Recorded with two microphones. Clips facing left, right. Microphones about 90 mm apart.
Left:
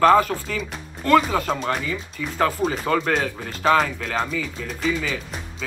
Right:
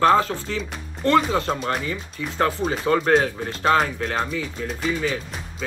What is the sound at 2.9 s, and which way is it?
Speech, 35° right (ahead or behind).